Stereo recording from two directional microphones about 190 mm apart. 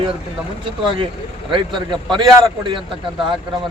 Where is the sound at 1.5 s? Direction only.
25° right (ahead or behind).